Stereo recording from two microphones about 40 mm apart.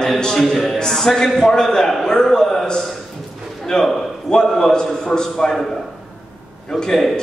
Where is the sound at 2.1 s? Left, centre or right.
Centre.